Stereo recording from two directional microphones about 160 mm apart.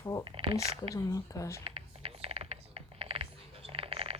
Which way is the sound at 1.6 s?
35° right (ahead or behind).